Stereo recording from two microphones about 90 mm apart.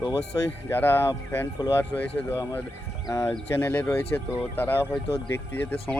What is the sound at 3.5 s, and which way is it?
Speech, 20° left (ahead or behind).